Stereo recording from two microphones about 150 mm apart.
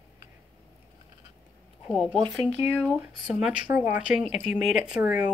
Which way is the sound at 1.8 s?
5° left (ahead or behind).